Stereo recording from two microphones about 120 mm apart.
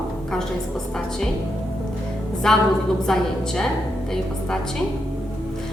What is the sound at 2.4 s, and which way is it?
A woman's voice, 5° left (ahead or behind).